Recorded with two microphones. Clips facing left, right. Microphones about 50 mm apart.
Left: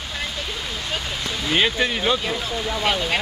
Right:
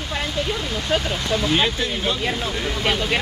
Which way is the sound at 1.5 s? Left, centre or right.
Left.